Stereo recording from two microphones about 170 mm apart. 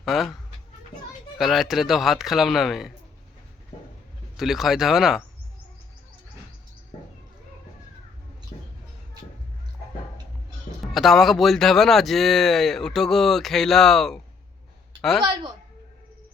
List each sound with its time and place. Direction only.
0.0 s speech: centre (ahead or behind)
1.4 s speech: centre (ahead or behind)
4.4 s speech: centre (ahead or behind)
8.5 s a sound: 35° left (ahead or behind)
10.9 s speech: centre (ahead or behind)